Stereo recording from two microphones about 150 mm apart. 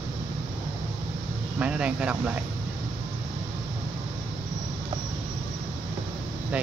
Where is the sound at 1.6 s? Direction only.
10° right (ahead or behind).